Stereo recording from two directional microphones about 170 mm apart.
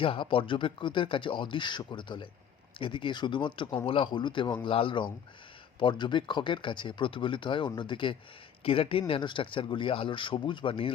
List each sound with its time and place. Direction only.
0.0 s speech: 30° left (ahead or behind)